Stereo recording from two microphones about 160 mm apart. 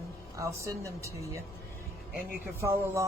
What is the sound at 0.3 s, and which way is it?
Speech, 20° right (ahead or behind).